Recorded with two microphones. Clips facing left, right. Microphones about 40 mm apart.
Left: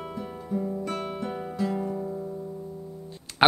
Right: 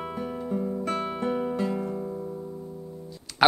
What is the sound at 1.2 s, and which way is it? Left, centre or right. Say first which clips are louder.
Music: right 4 dB; right.